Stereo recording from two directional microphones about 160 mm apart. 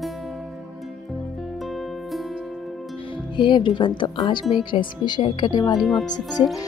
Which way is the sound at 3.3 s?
30° left (ahead or behind).